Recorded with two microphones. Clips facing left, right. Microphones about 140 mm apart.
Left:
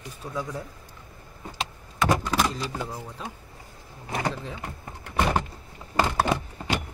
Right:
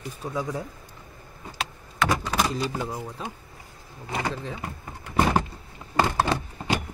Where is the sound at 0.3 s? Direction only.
15° right (ahead or behind).